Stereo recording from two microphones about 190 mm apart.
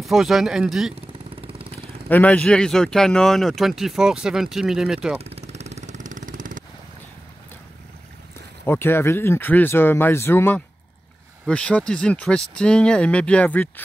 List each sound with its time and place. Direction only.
0.0 s speech: centre (ahead or behind)
1.3 s vehicle: 30° right (ahead or behind)
2.0 s speech: 10° left (ahead or behind)
5.5 s vehicle: 35° right (ahead or behind)
8.6 s speech: 10° left (ahead or behind)